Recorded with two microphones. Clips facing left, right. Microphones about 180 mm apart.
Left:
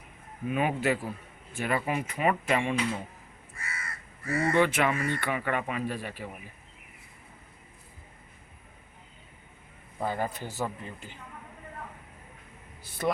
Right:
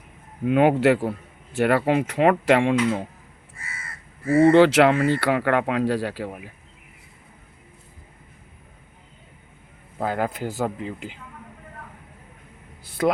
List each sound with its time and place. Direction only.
0.4 s speech: 75° right (ahead or behind)
3.6 s crow: 25° right (ahead or behind)
4.3 s speech: 25° right (ahead or behind)
4.5 s speech: 80° right
10.0 s speech: 90° right
13.0 s speech: 90° right